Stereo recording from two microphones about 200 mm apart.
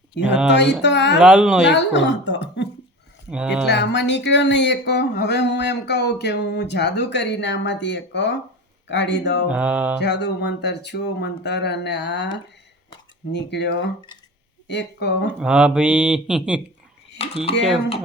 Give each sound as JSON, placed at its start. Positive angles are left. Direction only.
{"t": 0.4, "sound": "speech", "side_deg": 60}
{"t": 1.2, "sound": "speech", "side_deg": -5}
{"t": 1.6, "sound": "speech", "side_deg": 60}
{"t": 3.2, "sound": "speech", "side_deg": -5}
{"t": 3.7, "sound": "speech", "side_deg": 60}
{"t": 9.5, "sound": "mantra", "side_deg": -5}
{"t": 10.0, "sound": "speech", "side_deg": 60}
{"t": 15.4, "sound": "speech", "side_deg": -5}
{"t": 17.2, "sound": "speech", "side_deg": 30}